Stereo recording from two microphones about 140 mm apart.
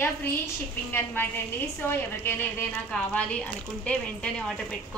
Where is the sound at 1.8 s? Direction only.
15° left (ahead or behind).